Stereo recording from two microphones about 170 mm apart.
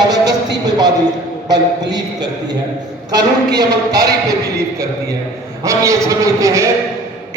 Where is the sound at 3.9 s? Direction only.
70° right (ahead or behind).